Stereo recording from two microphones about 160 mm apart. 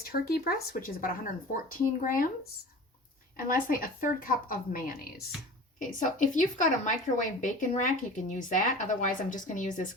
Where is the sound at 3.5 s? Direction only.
60° left (ahead or behind).